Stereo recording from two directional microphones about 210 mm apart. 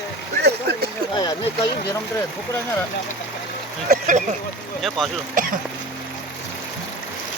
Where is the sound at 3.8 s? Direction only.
40° right (ahead or behind).